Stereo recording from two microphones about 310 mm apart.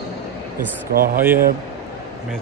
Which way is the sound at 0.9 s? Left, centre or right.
Right.